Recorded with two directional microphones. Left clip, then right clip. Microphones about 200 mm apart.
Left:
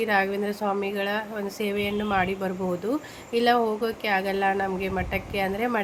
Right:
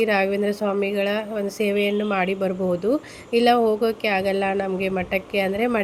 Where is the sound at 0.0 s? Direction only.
15° right (ahead or behind).